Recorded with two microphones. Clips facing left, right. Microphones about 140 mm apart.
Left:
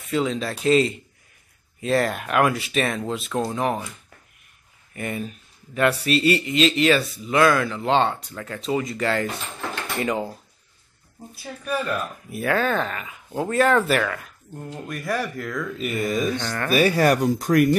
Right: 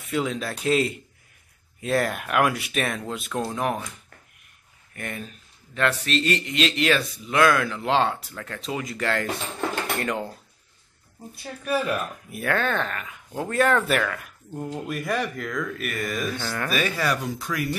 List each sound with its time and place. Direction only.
0.0 s speech: centre (ahead or behind)
4.9 s speech: 5° left (ahead or behind)
11.3 s speech: 5° right (ahead or behind)
15.9 s speech: 25° left (ahead or behind)
16.3 s speech: 5° right (ahead or behind)
16.7 s speech: 40° left (ahead or behind)